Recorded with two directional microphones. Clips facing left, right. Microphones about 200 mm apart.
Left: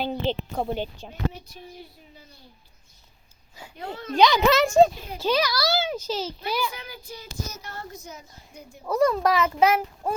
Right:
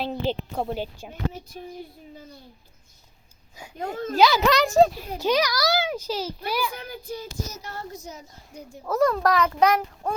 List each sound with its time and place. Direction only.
0.0 s a woman's voice: centre (ahead or behind)
3.8 s a child's voice: 40° right (ahead or behind)
4.2 s a woman's voice: 5° right (ahead or behind)
5.1 s a child's voice: 15° right (ahead or behind)
6.7 s a sound: 55° right (ahead or behind)
7.9 s a child's voice: 40° right (ahead or behind)
8.8 s a woman's voice: centre (ahead or behind)